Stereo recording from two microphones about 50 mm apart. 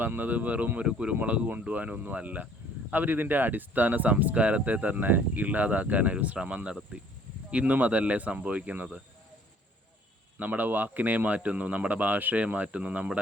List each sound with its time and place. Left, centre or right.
0.0 s speech: right
10.3 s speech: right